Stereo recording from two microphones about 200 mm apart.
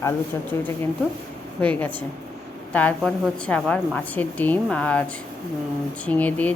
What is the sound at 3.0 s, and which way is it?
A woman's voice, centre (ahead or behind).